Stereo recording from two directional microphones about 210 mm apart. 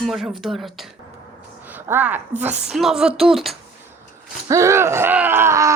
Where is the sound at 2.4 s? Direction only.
5° right (ahead or behind).